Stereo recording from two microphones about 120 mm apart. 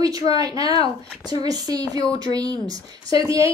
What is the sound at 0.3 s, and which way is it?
A woman's voice, 30° right (ahead or behind).